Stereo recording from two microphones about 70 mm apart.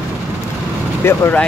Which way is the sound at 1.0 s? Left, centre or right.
Left.